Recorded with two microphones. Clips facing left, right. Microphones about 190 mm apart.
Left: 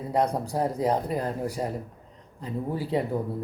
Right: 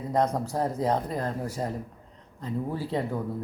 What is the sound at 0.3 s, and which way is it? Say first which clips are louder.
Speech: left 1 dB; 10° left (ahead or behind).